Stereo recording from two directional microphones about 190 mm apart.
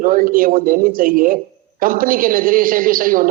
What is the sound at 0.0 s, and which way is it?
A man's voice, 45° right (ahead or behind).